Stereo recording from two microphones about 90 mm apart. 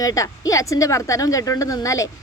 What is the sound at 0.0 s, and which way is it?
A woman's voice, 40° left (ahead or behind).